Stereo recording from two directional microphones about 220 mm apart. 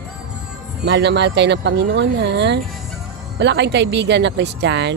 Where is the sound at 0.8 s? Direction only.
50° right (ahead or behind).